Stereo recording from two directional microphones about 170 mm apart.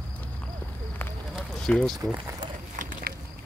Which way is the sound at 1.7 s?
5° left (ahead or behind).